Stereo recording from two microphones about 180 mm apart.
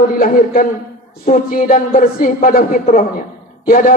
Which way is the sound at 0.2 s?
50° left (ahead or behind).